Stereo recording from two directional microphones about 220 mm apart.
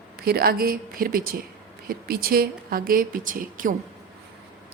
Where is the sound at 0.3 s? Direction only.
45° right (ahead or behind).